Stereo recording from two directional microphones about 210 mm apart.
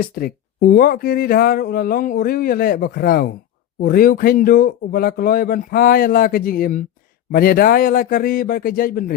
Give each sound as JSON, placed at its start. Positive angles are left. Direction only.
{"t": 0.0, "sound": "speech", "side_deg": 45}